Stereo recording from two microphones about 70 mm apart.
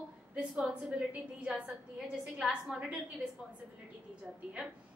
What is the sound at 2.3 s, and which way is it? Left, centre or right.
Speech, centre.